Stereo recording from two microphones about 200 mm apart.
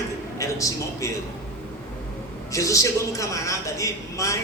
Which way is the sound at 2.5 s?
15° left (ahead or behind).